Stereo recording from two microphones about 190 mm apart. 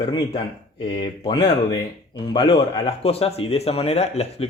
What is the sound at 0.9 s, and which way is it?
Speech, 25° left (ahead or behind).